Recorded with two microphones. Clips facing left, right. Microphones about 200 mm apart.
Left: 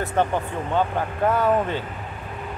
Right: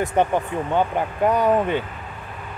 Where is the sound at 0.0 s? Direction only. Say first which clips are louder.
Right 3 dB; 15° right (ahead or behind).